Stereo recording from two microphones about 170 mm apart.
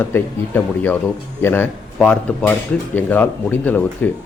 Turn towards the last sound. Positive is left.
turn(degrees=10)  # may be behind; listen again after turning